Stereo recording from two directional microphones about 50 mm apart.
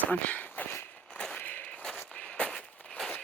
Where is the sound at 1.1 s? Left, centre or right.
Centre.